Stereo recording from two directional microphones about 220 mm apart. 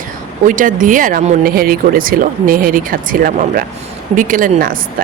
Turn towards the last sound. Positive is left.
turn(degrees=-40)  # may be behind; listen again after turning